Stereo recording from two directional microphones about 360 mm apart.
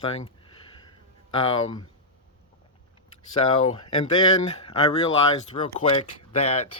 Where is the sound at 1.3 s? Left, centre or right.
Centre.